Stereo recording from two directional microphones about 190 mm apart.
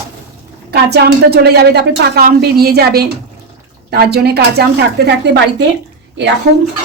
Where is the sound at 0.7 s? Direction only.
60° right (ahead or behind).